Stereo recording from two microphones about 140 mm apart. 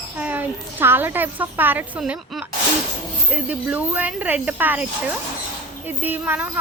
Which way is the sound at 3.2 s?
10° right (ahead or behind).